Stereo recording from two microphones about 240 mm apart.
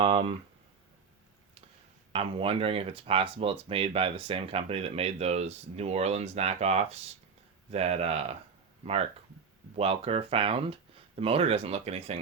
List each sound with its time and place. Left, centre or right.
0.0 s speech: right
2.1 s speech: right
9.7 s speech: right